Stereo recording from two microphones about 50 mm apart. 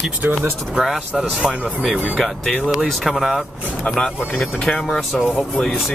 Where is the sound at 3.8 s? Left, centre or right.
Centre.